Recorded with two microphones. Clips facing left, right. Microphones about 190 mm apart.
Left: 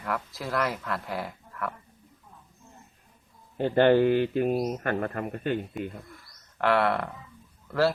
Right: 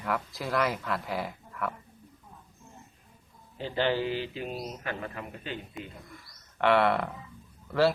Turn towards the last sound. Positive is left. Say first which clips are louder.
# even
turn(degrees=0)  # may be behind; listen again after turning